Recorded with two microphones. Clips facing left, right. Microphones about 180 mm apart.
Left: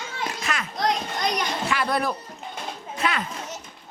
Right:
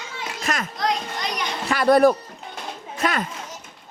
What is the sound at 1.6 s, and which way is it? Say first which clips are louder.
A child's voice: right 12 dB; 40° right (ahead or behind).